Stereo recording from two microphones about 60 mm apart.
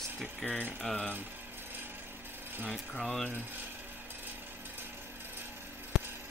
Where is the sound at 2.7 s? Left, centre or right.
Centre.